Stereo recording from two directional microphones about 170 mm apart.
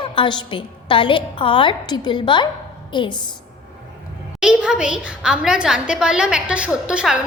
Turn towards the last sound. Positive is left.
turn(degrees=-5)  # may be behind; listen again after turning